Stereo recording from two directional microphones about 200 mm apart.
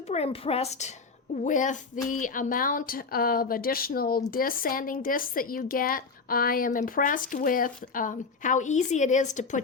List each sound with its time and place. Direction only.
0.1 s a woman's voice: 30° left (ahead or behind)